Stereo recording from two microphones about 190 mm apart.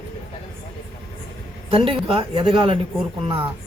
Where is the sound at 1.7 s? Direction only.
30° right (ahead or behind).